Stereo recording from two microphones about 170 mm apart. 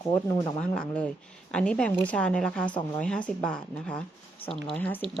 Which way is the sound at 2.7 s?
25° left (ahead or behind).